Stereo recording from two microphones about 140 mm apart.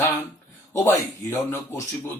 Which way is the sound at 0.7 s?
15° left (ahead or behind).